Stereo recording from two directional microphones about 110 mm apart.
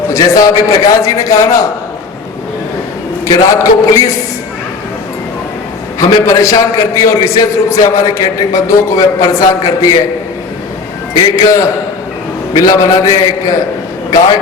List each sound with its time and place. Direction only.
0.1 s a man's voice: 30° left (ahead or behind)
3.2 s a man's voice: 30° left (ahead or behind)
6.0 s a man's voice: 30° left (ahead or behind)
11.1 s a man's voice: 35° left (ahead or behind)